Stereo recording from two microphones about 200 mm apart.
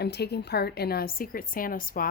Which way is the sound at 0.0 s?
55° left (ahead or behind).